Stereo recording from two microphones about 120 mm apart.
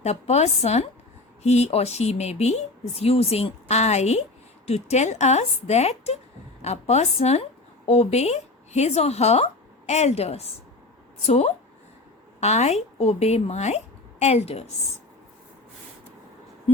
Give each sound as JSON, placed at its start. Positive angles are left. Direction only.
{"t": 0.0, "sound": "a woman's voice", "side_deg": 65}